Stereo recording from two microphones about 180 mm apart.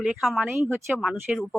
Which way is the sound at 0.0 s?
Centre (ahead or behind).